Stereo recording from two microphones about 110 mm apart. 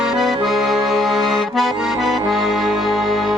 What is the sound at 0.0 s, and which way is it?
Accordion, 5° right (ahead or behind).